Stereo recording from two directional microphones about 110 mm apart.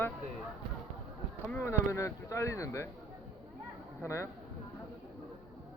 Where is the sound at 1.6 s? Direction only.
25° left (ahead or behind).